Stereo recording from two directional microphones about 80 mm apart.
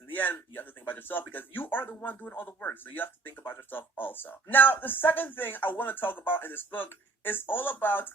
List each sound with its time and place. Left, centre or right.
0.1 s speech: left